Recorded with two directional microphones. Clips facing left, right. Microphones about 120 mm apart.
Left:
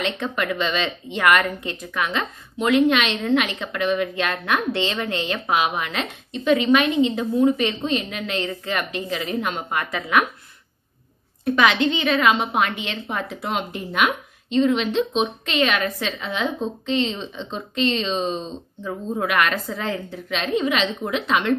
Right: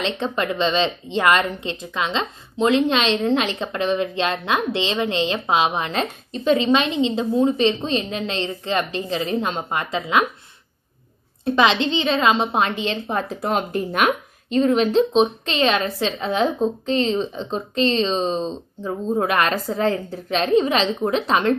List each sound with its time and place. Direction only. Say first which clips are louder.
0.0 s a woman's voice: right 2 dB; 25° right (ahead or behind)
11.4 s a woman's voice: right 1 dB; 25° right (ahead or behind)